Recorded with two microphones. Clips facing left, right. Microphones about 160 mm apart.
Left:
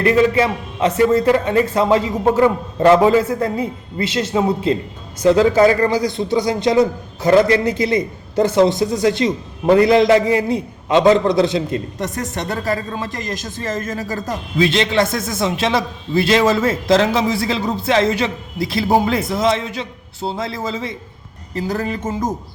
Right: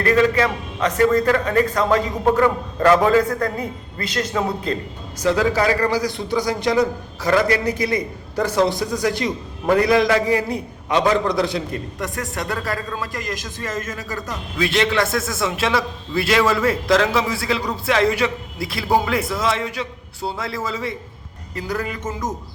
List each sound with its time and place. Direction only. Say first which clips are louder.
0.0 s a man's voice: left 3 dB; 25° left (ahead or behind)
14.6 s a man's voice: left 3 dB; 25° left (ahead or behind)